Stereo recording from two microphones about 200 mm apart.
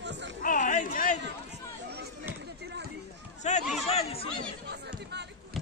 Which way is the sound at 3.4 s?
35° left (ahead or behind).